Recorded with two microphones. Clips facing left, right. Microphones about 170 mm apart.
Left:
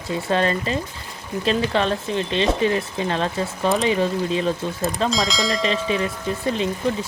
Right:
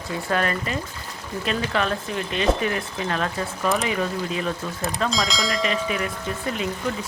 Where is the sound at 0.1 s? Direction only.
25° left (ahead or behind).